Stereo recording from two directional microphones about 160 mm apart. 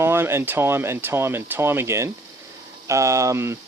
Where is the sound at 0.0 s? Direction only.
15° right (ahead or behind).